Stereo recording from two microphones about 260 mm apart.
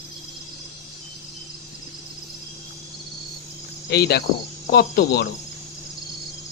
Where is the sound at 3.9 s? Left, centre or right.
Left.